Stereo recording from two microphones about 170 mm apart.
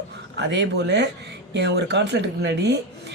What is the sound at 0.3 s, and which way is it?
Speech, 90° right.